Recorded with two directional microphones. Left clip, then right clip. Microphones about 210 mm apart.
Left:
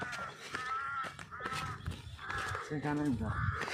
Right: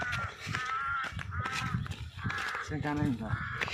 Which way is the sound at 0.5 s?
45° right (ahead or behind).